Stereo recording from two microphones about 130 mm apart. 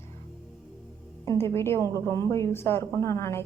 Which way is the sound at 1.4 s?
20° left (ahead or behind).